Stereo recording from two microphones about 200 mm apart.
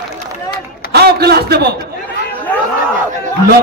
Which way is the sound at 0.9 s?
55° right (ahead or behind).